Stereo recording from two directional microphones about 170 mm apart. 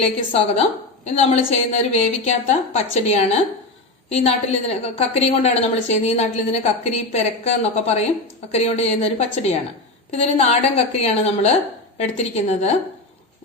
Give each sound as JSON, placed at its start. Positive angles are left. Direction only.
{"t": 0.3, "sound": "a woman's voice", "side_deg": 35}